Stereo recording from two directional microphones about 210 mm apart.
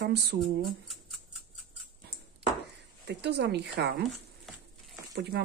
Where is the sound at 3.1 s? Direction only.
50° right (ahead or behind).